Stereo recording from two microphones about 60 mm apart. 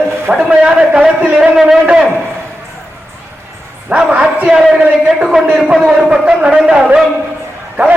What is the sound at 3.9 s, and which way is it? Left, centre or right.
Speech, right.